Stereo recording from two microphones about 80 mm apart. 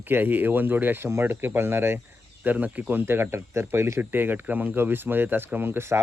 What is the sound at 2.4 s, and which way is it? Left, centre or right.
Speech, right.